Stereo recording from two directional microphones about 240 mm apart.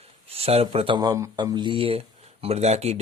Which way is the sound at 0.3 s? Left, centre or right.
Right.